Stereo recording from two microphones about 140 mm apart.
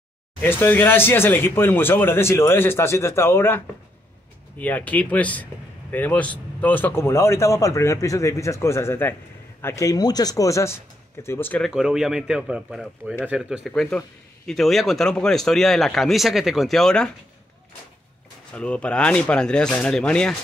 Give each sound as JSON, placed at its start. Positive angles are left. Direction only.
{"t": 0.4, "sound": "a man's voice", "side_deg": 15}
{"t": 11.6, "sound": "speech", "side_deg": -5}
{"t": 13.7, "sound": "speech", "side_deg": 5}
{"t": 18.5, "sound": "speech", "side_deg": 10}